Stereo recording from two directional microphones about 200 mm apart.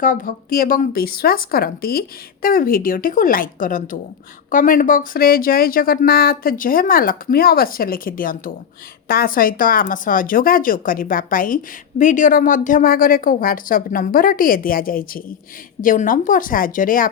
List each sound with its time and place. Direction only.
0.0 s speech: 45° left (ahead or behind)